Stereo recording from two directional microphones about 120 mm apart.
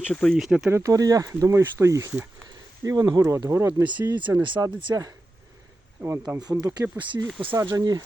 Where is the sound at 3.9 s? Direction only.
40° right (ahead or behind).